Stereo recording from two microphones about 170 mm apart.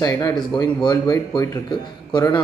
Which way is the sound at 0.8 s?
25° left (ahead or behind).